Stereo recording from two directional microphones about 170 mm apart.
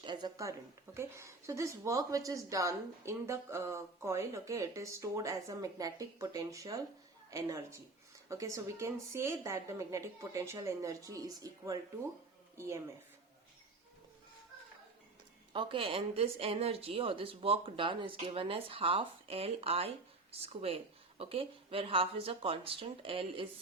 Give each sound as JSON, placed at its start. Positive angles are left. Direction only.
{"t": 0.0, "sound": "a woman's voice", "side_deg": -25}
{"t": 15.5, "sound": "speech", "side_deg": -30}